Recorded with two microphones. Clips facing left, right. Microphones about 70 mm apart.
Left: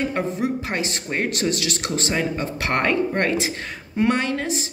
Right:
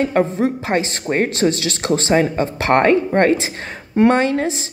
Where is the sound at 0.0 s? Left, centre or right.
Right.